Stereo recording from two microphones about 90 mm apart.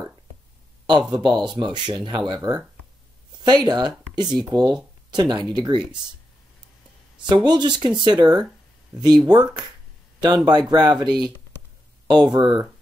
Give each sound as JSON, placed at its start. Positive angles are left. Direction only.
{"t": 1.1, "sound": "speech", "side_deg": -55}
{"t": 7.2, "sound": "speech", "side_deg": -55}